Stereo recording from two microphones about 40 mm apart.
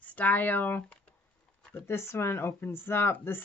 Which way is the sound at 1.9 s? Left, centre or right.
Left.